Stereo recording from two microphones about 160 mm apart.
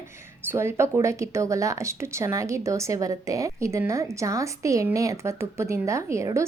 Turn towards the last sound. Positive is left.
turn(degrees=-20)  # may be behind; listen again after turning